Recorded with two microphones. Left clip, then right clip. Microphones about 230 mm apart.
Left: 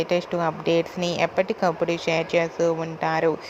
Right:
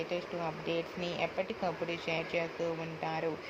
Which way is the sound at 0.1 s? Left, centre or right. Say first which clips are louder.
Left 13 dB; left.